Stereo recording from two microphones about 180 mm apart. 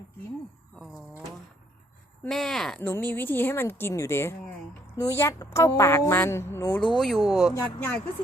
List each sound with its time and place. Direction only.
2.2 s speech: centre (ahead or behind)
6.9 s speech: centre (ahead or behind)